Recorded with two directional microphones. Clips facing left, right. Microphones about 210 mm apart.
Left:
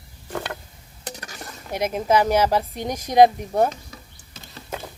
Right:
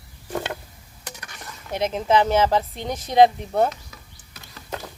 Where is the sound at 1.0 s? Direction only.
35° left (ahead or behind).